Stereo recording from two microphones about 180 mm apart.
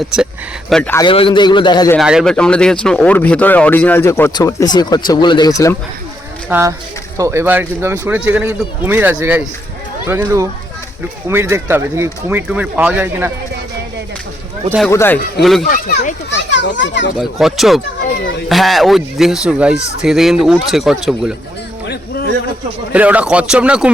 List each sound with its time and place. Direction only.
0.7 s speech: 5° left (ahead or behind)
0.9 s a man's voice: 30° left (ahead or behind)
2.0 s speech: centre (ahead or behind); by 5.7 s 20° left (ahead or behind)
6.5 s speech: 15° right (ahead or behind)
14.8 s speech: 15° left (ahead or behind)
15.4 s speech: centre (ahead or behind)
15.6 s a child's voice: 60° left (ahead or behind); by 17.1 s 85° left
17.2 s speech: centre (ahead or behind)
18.1 s a child's voice: 70° left (ahead or behind)
18.4 s speech: centre (ahead or behind)
22.9 s speech: 10° right (ahead or behind)